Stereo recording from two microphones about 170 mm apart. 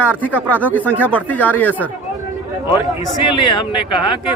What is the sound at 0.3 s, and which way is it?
Speech, 10° right (ahead or behind).